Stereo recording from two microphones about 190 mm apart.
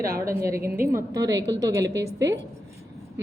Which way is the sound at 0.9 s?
15° right (ahead or behind).